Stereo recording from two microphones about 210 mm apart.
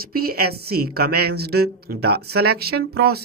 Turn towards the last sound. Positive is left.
turn(degrees=-50)  # may be behind; listen again after turning